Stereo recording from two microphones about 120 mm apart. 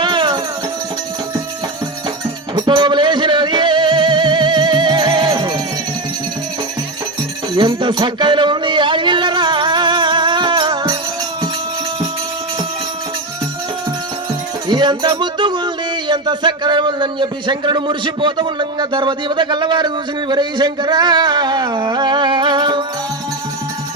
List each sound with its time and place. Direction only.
0.0 s music: 40° right (ahead or behind)
2.6 s music: 40° right (ahead or behind)
7.5 s a sound: 40° right (ahead or behind)
14.7 s music: 40° right (ahead or behind)